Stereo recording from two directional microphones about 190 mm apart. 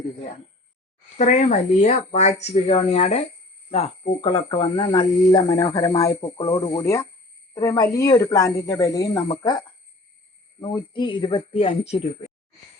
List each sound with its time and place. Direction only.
1.2 s speech: 40° left (ahead or behind)